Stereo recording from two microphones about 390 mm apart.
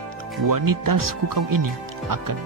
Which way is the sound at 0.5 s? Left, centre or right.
Right.